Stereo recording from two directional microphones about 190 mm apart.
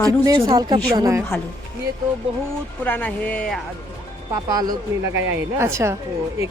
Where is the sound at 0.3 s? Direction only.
20° right (ahead or behind).